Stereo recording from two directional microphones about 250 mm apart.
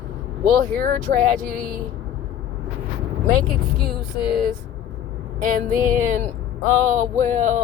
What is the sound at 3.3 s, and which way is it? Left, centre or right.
Speech, right.